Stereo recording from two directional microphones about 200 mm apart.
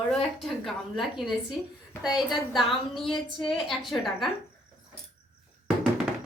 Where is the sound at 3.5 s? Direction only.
Centre (ahead or behind).